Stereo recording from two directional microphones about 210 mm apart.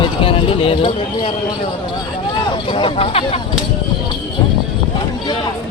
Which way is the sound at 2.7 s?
25° left (ahead or behind).